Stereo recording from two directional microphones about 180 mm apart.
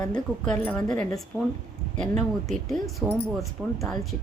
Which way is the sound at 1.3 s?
10° right (ahead or behind).